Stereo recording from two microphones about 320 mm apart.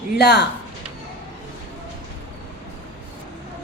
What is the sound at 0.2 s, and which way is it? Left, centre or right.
Speech, left.